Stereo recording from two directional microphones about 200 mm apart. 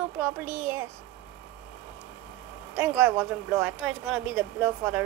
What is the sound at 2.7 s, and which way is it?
Speech, 10° right (ahead or behind).